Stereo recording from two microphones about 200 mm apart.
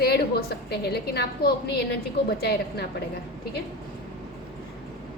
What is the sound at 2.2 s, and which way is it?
Speech, 55° left (ahead or behind).